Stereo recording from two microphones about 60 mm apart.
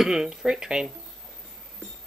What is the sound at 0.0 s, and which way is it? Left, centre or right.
Speech, centre.